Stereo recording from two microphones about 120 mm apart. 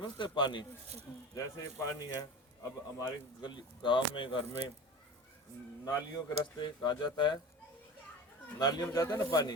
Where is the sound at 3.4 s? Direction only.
40° left (ahead or behind).